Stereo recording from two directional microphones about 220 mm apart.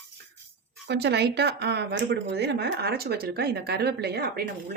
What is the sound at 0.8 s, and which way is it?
Speech, 50° right (ahead or behind).